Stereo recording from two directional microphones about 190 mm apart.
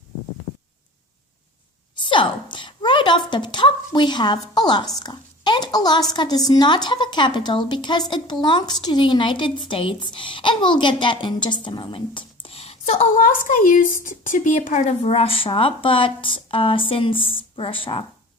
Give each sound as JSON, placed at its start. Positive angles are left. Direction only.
{"t": 2.0, "sound": "a woman's voice", "side_deg": 25}